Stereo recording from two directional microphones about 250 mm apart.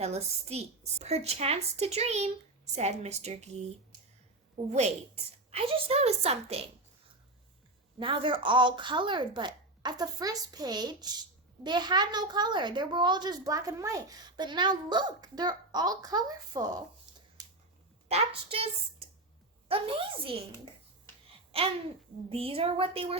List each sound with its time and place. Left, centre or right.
0.0 s speech: right
4.5 s speech: right
7.9 s a woman's voice: centre
18.1 s speech: right
22.3 s speech: right